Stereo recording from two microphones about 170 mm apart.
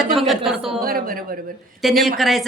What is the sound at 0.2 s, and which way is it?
Speech, centre (ahead or behind).